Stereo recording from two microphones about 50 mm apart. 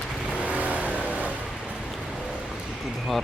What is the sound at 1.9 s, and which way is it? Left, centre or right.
Music, centre.